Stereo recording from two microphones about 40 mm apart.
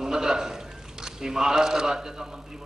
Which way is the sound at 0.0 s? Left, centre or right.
Centre.